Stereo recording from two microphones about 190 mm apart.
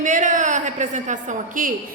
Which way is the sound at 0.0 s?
40° right (ahead or behind).